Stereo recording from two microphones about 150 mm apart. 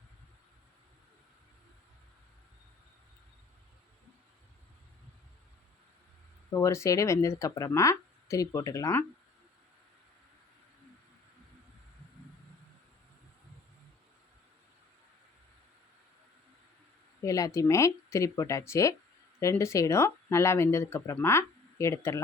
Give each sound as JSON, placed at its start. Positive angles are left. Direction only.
{"t": 6.5, "sound": "speech", "side_deg": 20}
{"t": 17.2, "sound": "speech", "side_deg": 20}